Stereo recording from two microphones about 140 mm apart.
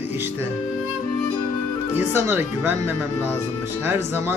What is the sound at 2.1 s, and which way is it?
Speech, 15° right (ahead or behind).